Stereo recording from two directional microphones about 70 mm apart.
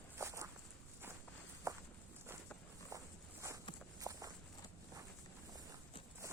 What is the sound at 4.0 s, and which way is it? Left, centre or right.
Walk, right.